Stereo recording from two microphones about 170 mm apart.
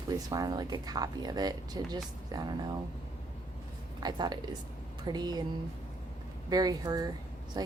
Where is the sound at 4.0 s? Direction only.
25° right (ahead or behind).